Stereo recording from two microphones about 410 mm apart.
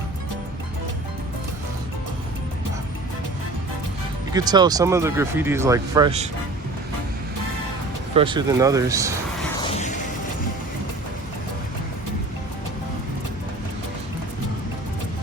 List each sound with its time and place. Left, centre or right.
4.4 s speech: centre
8.1 s speech: centre
9.7 s a sound: centre